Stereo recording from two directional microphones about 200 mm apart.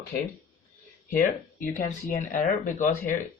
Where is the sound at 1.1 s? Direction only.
40° left (ahead or behind).